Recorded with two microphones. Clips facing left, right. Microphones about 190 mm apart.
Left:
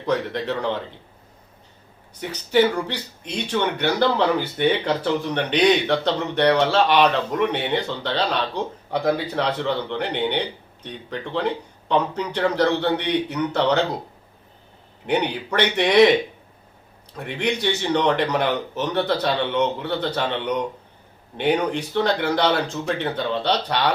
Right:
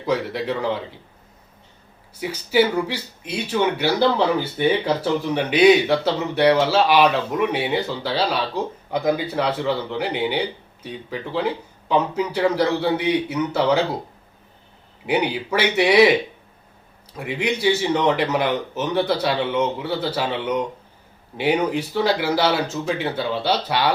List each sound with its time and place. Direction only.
0.0 s speech: 10° right (ahead or behind)
2.1 s speech: 5° right (ahead or behind)
15.0 s speech: 5° right (ahead or behind)
17.2 s speech: 5° right (ahead or behind)